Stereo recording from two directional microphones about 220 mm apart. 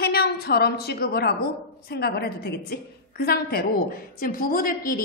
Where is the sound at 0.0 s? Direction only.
45° left (ahead or behind).